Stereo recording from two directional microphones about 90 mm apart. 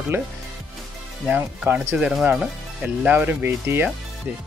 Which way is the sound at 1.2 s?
15° right (ahead or behind).